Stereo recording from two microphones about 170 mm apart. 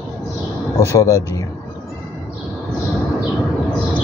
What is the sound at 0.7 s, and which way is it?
Speech, 20° left (ahead or behind).